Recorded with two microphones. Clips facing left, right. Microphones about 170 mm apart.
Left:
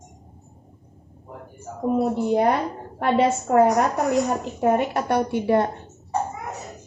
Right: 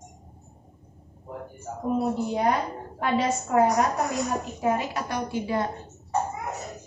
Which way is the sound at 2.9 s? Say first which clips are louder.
Left 5 dB; 60° left (ahead or behind).